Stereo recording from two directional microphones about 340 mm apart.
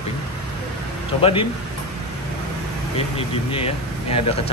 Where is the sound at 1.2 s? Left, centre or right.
Centre.